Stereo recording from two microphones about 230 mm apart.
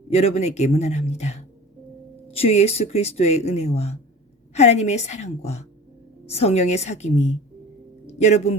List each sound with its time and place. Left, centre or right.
0.1 s a man's voice: left